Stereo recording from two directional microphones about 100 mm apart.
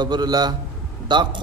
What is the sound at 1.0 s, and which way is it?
Speech, 50° right (ahead or behind).